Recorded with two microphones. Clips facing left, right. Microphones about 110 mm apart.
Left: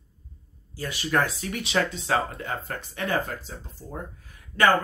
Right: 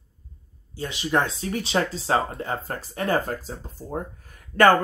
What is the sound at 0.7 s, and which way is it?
Speech, 20° right (ahead or behind).